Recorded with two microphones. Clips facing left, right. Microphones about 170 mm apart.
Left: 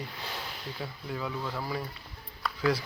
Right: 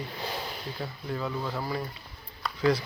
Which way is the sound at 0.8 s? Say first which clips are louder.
Right 2 dB; 5° left (ahead or behind).